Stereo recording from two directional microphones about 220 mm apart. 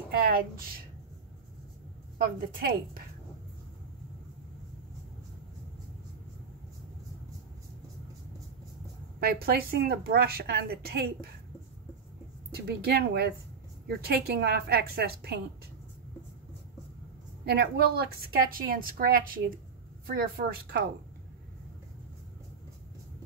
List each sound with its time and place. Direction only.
0.1 s a woman's voice: 40° right (ahead or behind)
9.2 s a woman's voice: 45° right (ahead or behind)
12.4 s a woman's voice: 45° right (ahead or behind)
17.5 s a woman's voice: 45° right (ahead or behind)